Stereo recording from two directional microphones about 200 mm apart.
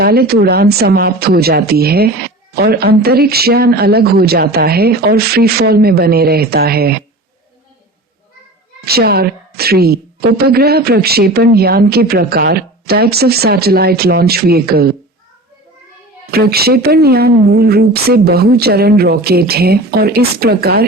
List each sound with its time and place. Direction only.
0.0 s speech: 50° right (ahead or behind)
8.8 s speech: 50° right (ahead or behind)
16.3 s speech: 50° right (ahead or behind)